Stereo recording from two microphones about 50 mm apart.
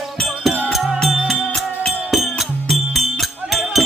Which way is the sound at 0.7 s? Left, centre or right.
Centre.